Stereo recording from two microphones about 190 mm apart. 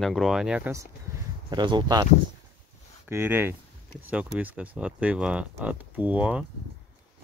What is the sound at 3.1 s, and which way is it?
Speech, 10° right (ahead or behind).